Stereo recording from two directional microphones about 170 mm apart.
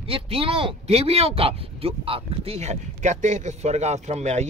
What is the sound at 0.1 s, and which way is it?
Speech, 35° right (ahead or behind).